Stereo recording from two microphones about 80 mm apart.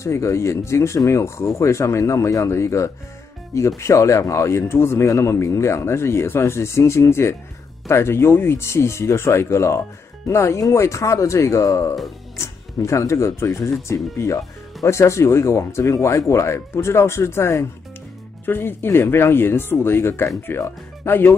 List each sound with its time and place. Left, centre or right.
0.0 s speech: left
18.4 s speech: left